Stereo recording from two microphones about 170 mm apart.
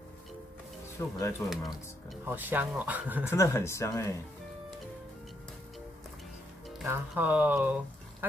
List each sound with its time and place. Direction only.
0.9 s speech: 15° left (ahead or behind)
1.4 s speech: centre (ahead or behind)
3.3 s speech: 15° left (ahead or behind)
6.9 s speech: 10° right (ahead or behind)